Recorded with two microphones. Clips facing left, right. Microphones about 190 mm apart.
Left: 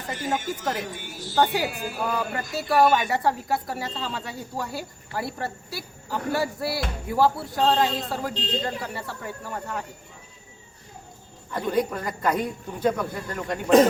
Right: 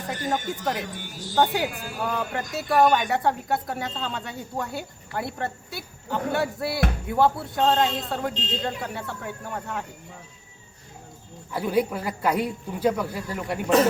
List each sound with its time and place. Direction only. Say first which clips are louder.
0.1 s speech: even; 5° left (ahead or behind)
11.5 s speech: right 1 dB; 10° right (ahead or behind)